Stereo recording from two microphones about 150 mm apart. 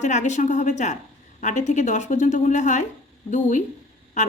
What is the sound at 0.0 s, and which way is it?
A woman's voice, 55° left (ahead or behind).